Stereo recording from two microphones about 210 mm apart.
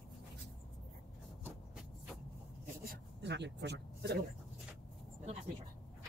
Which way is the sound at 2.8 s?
50° right (ahead or behind).